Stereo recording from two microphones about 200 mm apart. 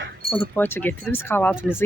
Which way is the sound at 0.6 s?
10° left (ahead or behind).